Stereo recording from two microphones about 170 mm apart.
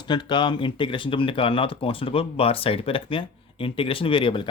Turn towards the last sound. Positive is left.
turn(degrees=30)  # may be behind; listen again after turning